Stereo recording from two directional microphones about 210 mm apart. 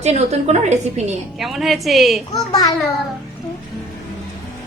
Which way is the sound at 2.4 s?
15° left (ahead or behind).